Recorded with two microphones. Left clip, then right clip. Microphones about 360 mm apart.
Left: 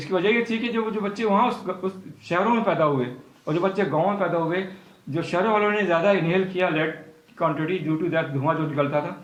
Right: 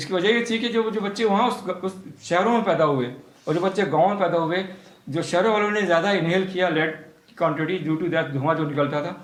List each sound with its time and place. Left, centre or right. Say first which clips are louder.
0.1 s speech: right 1 dB; centre